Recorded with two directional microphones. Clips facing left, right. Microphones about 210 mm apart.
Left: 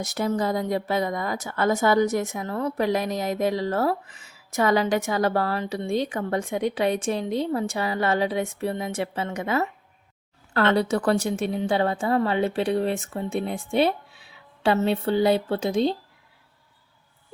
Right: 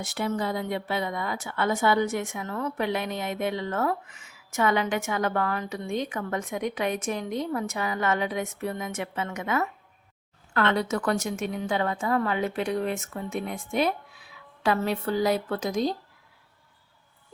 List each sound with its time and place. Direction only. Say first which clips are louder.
0.0 s a woman's voice: left 4 dB; 40° left (ahead or behind)